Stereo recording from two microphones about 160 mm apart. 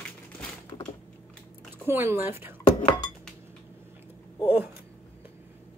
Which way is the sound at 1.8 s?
15° right (ahead or behind).